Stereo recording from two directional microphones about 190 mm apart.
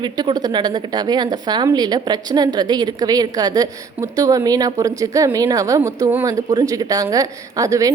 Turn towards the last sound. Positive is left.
turn(degrees=-15)  # may be behind; listen again after turning